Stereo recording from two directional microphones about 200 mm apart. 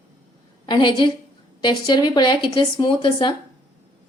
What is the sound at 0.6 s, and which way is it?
A woman's voice, 25° left (ahead or behind).